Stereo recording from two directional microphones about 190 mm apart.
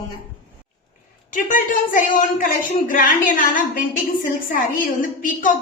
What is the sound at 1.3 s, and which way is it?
A woman's voice, 45° left (ahead or behind).